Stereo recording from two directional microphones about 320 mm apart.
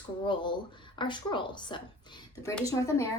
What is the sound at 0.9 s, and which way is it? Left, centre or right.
A woman's voice, centre.